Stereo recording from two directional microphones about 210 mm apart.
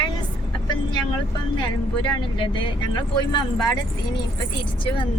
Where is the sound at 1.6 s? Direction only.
25° left (ahead or behind).